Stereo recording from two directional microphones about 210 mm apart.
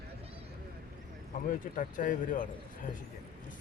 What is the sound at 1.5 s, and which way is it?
Speech, 40° left (ahead or behind).